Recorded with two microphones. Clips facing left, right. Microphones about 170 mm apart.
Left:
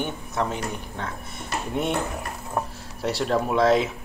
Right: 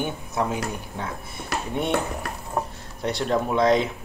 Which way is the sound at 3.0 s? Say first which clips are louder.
Even; centre (ahead or behind).